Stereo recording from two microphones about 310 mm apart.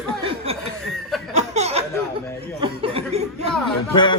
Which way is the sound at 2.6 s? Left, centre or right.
Centre.